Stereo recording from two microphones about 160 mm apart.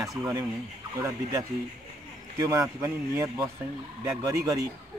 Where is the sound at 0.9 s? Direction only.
20° right (ahead or behind).